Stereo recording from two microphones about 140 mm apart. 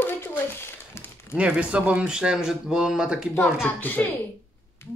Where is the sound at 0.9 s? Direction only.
15° left (ahead or behind).